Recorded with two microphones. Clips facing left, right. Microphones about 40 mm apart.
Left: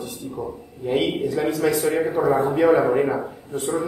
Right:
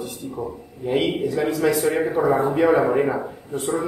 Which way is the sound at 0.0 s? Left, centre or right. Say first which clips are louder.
Right 1 dB; centre.